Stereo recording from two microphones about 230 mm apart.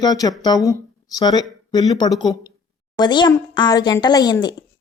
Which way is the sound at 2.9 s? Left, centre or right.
Centre.